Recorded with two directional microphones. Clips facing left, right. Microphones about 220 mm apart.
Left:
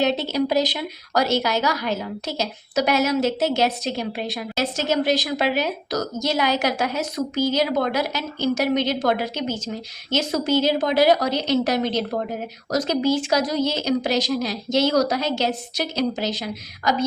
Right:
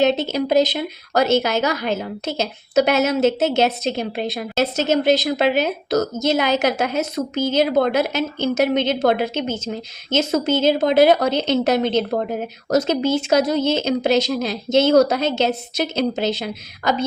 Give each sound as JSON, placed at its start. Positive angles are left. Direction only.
{"t": 0.0, "sound": "a woman's voice", "side_deg": -20}